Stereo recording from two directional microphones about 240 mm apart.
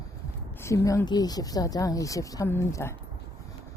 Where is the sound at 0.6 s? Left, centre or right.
Centre.